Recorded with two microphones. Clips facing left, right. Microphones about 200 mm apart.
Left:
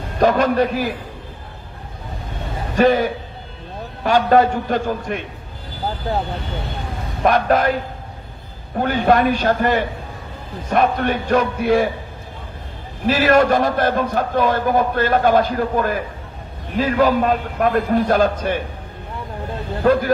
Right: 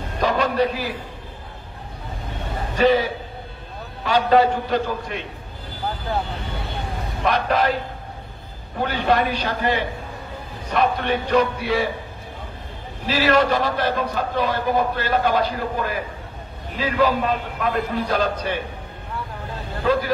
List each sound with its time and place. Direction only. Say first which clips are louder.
0.2 s a man's voice: left 5 dB; 50° left (ahead or behind)
2.7 s a man's voice: left 3 dB; 50° left (ahead or behind)
7.2 s a man's voice: left 4 dB; 50° left (ahead or behind)
8.7 s a man's voice: left 4 dB; 50° left (ahead or behind)
13.0 s a man's voice: left 4 dB; 50° left (ahead or behind)
19.8 s a man's voice: left 5 dB; 50° left (ahead or behind)